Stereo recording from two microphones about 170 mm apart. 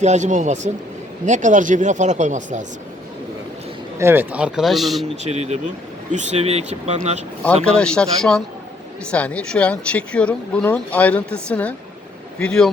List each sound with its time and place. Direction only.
0.0 s speech: 45° right (ahead or behind)
3.9 s a man's voice: 15° right (ahead or behind)
5.2 s speech: 40° right (ahead or behind)
7.4 s speech: 5° left (ahead or behind)